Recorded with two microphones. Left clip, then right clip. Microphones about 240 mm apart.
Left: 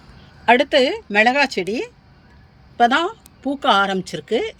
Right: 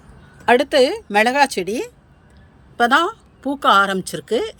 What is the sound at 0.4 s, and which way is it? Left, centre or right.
A woman's voice, centre.